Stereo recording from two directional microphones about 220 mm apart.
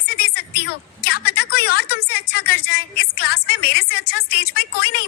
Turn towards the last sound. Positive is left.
turn(degrees=50)  # may be behind; listen again after turning